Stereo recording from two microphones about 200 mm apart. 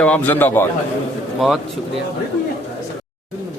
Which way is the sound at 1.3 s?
Centre (ahead or behind).